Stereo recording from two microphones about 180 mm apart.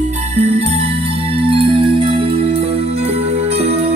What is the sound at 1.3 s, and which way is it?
Music, 30° right (ahead or behind).